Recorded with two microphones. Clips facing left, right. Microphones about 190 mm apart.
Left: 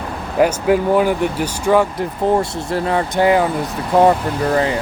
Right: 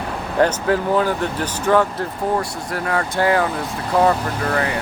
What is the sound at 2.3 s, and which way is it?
Speech, 25° left (ahead or behind).